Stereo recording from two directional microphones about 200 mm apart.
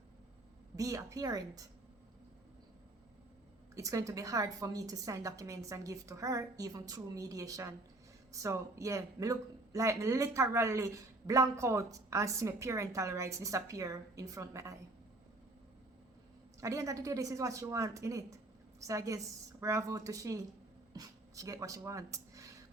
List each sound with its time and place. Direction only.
0.8 s speech: 15° right (ahead or behind)
3.8 s speech: 15° right (ahead or behind)
16.6 s speech: 15° right (ahead or behind)